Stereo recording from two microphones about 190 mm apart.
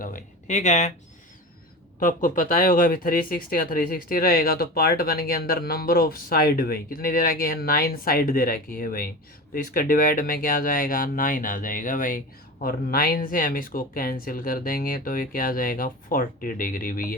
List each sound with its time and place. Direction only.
0.0 s speech: 45° left (ahead or behind)
2.0 s speech: 45° left (ahead or behind)